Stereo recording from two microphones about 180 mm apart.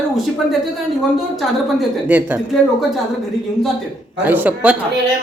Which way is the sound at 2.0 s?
10° right (ahead or behind).